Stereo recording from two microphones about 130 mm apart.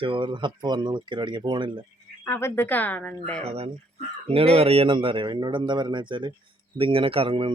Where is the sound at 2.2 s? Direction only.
20° left (ahead or behind).